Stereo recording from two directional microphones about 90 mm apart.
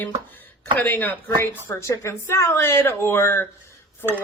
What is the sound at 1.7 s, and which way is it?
Speech, 35° left (ahead or behind).